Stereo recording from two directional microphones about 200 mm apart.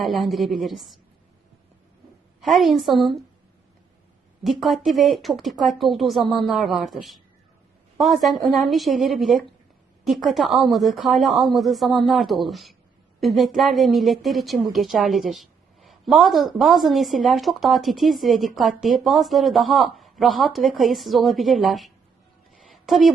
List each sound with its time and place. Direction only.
0.0 s a woman's voice: centre (ahead or behind)
2.4 s a woman's voice: centre (ahead or behind)
4.4 s a woman's voice: centre (ahead or behind)
22.6 s a sound: centre (ahead or behind)